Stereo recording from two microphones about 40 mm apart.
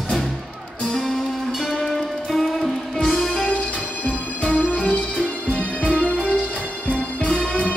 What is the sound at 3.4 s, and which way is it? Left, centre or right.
Music, left.